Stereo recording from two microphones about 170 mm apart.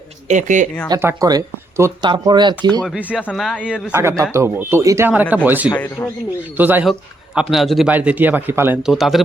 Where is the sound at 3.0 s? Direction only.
10° right (ahead or behind).